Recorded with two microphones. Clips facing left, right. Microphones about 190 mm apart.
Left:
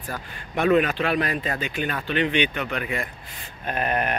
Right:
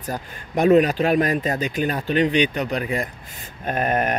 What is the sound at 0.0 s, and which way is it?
A man's voice, 40° right (ahead or behind).